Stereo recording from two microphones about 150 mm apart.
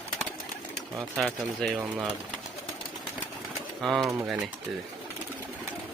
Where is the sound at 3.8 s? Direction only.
Centre (ahead or behind).